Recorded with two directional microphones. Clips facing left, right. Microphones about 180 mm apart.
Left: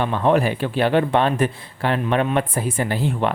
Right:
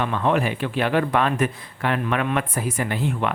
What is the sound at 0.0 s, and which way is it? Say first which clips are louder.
A man's voice: left 3 dB; 30° left (ahead or behind).